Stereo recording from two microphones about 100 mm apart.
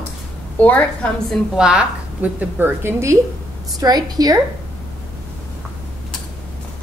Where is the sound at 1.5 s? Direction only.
10° right (ahead or behind); by 3.2 s 25° right (ahead or behind).